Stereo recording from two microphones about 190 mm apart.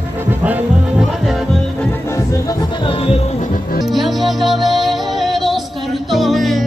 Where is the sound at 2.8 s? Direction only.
30° left (ahead or behind).